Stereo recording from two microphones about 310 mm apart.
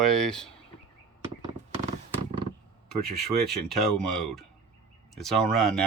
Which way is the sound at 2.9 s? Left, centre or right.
Centre.